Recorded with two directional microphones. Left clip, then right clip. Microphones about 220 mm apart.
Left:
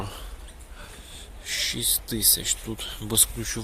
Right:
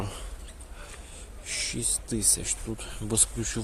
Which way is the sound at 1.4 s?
10° right (ahead or behind).